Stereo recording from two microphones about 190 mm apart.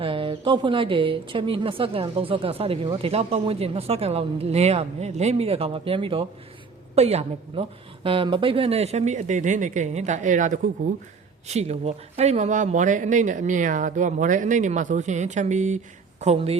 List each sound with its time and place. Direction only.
0.0 s a woman's voice: 30° right (ahead or behind)